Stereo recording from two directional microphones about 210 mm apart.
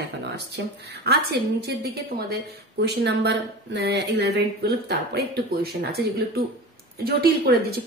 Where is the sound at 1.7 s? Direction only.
50° right (ahead or behind).